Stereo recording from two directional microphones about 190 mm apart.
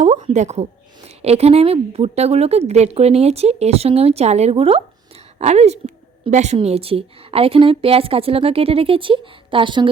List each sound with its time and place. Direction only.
0.0 s a woman's voice: 35° right (ahead or behind)